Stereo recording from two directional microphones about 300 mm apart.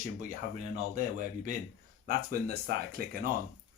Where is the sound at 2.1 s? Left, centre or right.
Right.